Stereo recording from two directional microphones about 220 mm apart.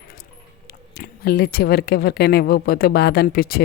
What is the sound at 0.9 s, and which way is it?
Speech, 45° left (ahead or behind).